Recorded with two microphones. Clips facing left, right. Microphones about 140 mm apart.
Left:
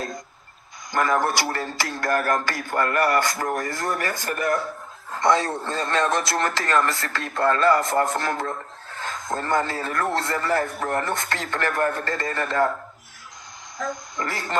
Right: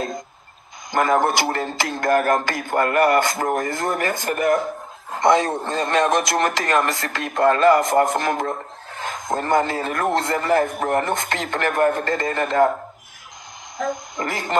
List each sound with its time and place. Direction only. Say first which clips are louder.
0.9 s speech: right 4 dB; 20° right (ahead or behind)
13.7 s speech: right 4 dB; 20° right (ahead or behind)